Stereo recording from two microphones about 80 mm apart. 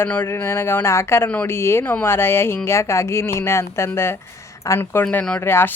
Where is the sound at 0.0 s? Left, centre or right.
Left.